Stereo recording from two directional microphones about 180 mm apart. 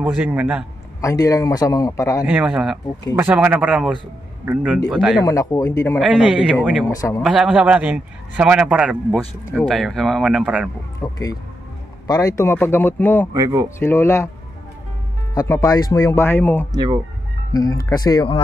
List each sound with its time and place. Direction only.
0.0 s speech: 10° right (ahead or behind)
1.0 s speech: 20° left (ahead or behind)
2.2 s a man's voice: 5° right (ahead or behind)
5.2 s speech: 20° left (ahead or behind)
5.9 s a man's voice: 5° right (ahead or behind)
11.0 s speech: 20° left (ahead or behind)
13.3 s speech: 15° right (ahead or behind)
13.7 s speech: 15° left (ahead or behind)
15.3 s speech: 15° left (ahead or behind)
16.7 s speech: 25° right (ahead or behind)
17.5 s speech: 20° left (ahead or behind)